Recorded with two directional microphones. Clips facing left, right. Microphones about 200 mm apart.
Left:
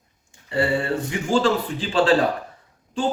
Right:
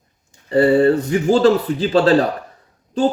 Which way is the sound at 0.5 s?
40° right (ahead or behind).